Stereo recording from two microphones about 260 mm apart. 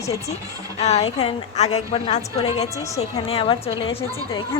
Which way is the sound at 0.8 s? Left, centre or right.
Left.